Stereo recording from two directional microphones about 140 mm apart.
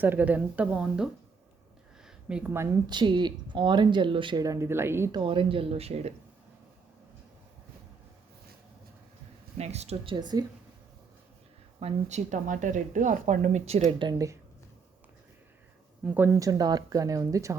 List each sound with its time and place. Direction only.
0.0 s speech: 15° right (ahead or behind)
2.8 s speech: 30° right (ahead or behind)
4.4 s speech: 20° right (ahead or behind)
5.1 s speech: 35° right (ahead or behind)
9.6 s speech: 50° right (ahead or behind)
10.2 s speech: 30° right (ahead or behind)
11.8 s speech: 50° right (ahead or behind)
14.0 s speech: 25° right (ahead or behind)
16.0 s speech: 15° right (ahead or behind)
16.4 s speech: 25° right (ahead or behind)